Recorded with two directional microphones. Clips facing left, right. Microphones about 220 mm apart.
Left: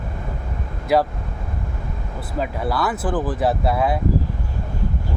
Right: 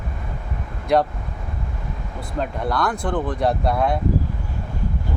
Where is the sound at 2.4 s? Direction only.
5° left (ahead or behind).